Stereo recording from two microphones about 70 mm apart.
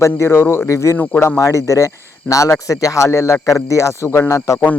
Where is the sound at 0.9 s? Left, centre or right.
Left.